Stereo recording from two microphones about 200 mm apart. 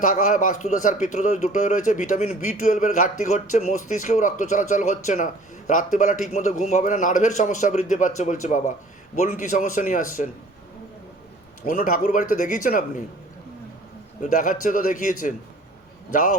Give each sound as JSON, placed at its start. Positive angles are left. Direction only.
{"t": 0.0, "sound": "a man's voice", "side_deg": 40}
{"t": 11.6, "sound": "speech", "side_deg": 45}
{"t": 14.2, "sound": "a man's voice", "side_deg": 40}
{"t": 16.1, "sound": "a man's voice", "side_deg": 40}